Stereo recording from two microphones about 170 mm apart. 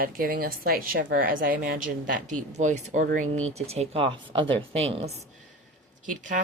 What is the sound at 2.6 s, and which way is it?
Speech, 45° right (ahead or behind).